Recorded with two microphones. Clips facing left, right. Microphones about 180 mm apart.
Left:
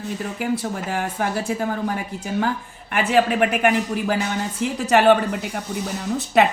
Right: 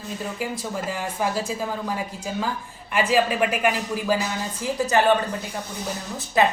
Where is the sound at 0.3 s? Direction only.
65° left (ahead or behind).